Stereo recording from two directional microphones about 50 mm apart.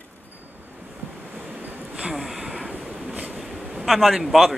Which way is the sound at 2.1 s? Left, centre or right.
Centre.